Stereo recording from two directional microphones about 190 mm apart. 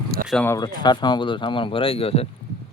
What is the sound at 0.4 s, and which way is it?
Speech, 20° left (ahead or behind).